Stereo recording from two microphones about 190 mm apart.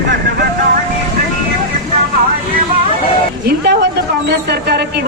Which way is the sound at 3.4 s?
60° right (ahead or behind).